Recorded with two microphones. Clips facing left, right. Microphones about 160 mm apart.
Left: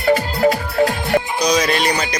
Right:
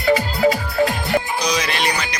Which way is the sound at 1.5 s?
40° left (ahead or behind).